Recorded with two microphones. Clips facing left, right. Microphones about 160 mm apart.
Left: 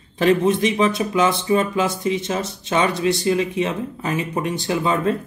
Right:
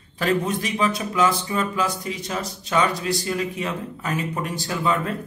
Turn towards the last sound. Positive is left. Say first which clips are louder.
# left 4 dB
turn(degrees=20)  # may be behind; listen again after turning